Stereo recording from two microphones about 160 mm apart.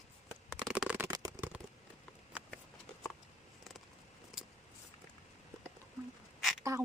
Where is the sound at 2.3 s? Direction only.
10° right (ahead or behind).